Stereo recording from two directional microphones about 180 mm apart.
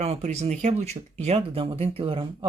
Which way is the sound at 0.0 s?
35° right (ahead or behind).